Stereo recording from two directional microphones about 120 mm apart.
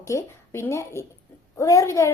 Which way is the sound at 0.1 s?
25° left (ahead or behind).